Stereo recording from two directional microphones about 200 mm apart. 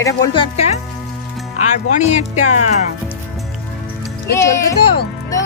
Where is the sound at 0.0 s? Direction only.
25° left (ahead or behind).